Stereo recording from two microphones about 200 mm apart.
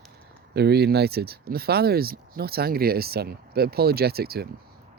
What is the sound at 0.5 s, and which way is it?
Speech, 55° right (ahead or behind).